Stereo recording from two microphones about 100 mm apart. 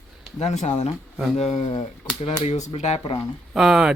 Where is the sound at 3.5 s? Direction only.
5° right (ahead or behind).